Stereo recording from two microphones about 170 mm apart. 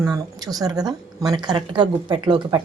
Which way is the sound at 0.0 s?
20° right (ahead or behind).